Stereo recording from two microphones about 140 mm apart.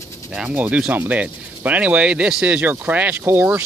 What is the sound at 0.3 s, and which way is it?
Speech, 10° right (ahead or behind).